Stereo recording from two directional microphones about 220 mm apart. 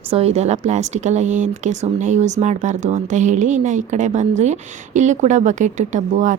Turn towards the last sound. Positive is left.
turn(degrees=-35)  # may be behind; listen again after turning